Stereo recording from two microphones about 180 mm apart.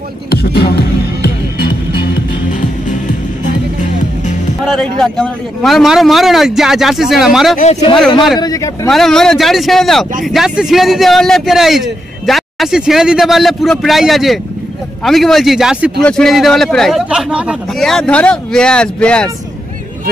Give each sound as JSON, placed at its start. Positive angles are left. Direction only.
{"t": 0.3, "sound": "music", "side_deg": 60}
{"t": 5.0, "sound": "a man's voice", "side_deg": 5}
{"t": 8.4, "sound": "speech", "side_deg": 20}
{"t": 8.8, "sound": "a man's voice", "side_deg": 0}